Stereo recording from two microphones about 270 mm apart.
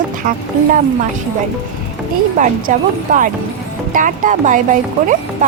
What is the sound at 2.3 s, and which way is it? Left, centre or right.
Speech, right.